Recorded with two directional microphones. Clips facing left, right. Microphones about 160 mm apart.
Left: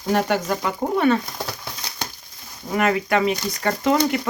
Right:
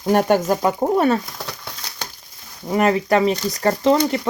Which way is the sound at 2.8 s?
35° right (ahead or behind).